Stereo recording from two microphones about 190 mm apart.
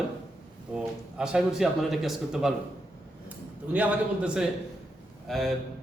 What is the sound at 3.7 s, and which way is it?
Speech, 5° right (ahead or behind).